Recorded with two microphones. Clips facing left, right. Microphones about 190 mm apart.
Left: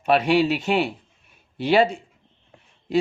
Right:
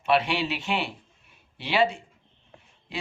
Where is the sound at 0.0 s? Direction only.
45° left (ahead or behind).